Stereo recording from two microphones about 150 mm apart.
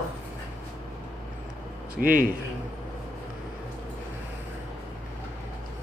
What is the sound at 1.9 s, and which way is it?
Speech, 70° right (ahead or behind).